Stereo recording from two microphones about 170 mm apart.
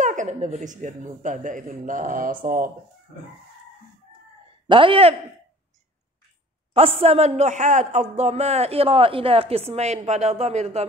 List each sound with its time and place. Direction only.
0.0 s speech: 50° right (ahead or behind)
4.6 s a man's voice: 30° right (ahead or behind)
6.7 s a man's voice: 35° right (ahead or behind)